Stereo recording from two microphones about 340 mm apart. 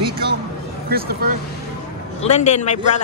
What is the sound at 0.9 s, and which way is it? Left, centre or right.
Speech, right.